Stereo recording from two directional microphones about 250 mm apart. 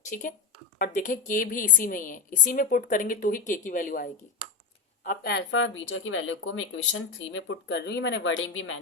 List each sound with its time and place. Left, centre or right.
0.1 s a woman's voice: left